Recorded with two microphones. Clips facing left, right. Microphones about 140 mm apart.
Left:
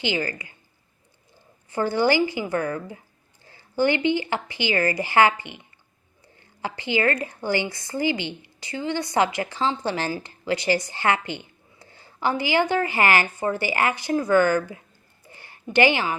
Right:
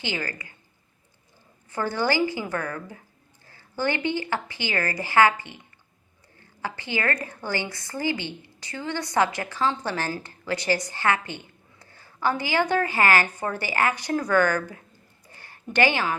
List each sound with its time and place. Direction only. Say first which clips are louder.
0.0 s speech: left 5 dB; 20° left (ahead or behind)
1.7 s a woman's voice: left 4 dB; 15° left (ahead or behind)
6.6 s a woman's voice: left 5 dB; 15° left (ahead or behind)
10.9 s a sound: left 2 dB; 20° left (ahead or behind)
12.7 s a woman's voice: left 1 dB; 15° left (ahead or behind)
15.4 s a sound: left 3 dB; 15° left (ahead or behind)